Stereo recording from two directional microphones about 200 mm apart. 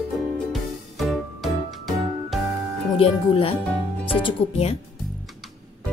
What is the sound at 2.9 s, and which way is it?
Speech, 30° left (ahead or behind).